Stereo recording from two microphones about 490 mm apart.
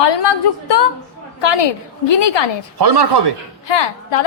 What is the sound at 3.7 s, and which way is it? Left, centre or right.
Speech, left.